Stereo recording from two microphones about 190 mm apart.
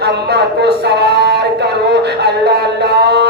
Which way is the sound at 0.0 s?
60° right (ahead or behind).